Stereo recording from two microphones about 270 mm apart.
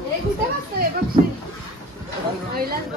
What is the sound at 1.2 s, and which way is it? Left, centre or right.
Speech, right.